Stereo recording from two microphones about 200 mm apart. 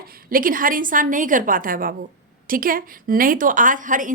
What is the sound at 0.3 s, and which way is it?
A woman's voice, 45° right (ahead or behind).